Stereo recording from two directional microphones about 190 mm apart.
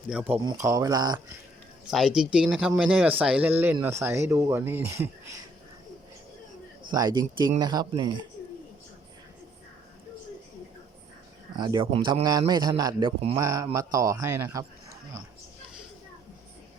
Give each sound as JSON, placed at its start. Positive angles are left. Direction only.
{"t": 0.1, "sound": "a man's voice", "side_deg": -10}
{"t": 1.9, "sound": "speech", "side_deg": 0}
{"t": 6.8, "sound": "a man's voice", "side_deg": -20}
{"t": 11.5, "sound": "a man's voice", "side_deg": -20}